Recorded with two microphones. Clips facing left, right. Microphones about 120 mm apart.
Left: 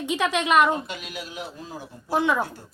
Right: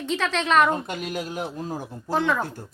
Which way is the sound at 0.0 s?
15° left (ahead or behind).